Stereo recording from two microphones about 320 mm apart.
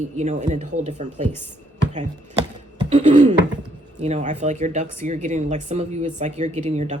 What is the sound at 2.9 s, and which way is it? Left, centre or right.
A woman's voice, right.